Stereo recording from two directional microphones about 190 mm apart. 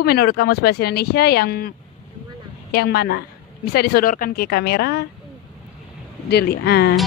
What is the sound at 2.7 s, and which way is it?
Speech, 55° left (ahead or behind).